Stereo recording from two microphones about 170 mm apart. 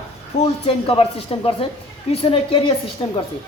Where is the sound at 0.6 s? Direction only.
35° left (ahead or behind).